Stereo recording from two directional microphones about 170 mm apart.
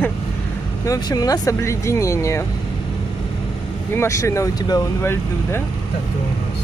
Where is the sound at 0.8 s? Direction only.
20° left (ahead or behind).